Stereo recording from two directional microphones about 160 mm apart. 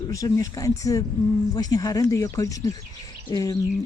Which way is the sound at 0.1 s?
20° left (ahead or behind).